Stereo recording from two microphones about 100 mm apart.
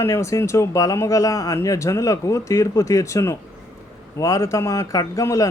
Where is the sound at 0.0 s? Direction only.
30° left (ahead or behind).